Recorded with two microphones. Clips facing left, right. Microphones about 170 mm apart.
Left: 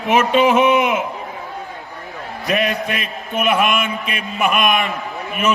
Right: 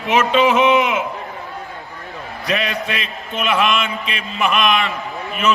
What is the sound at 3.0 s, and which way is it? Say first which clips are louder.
A man's voice: left 2 dB; 50° left (ahead or behind).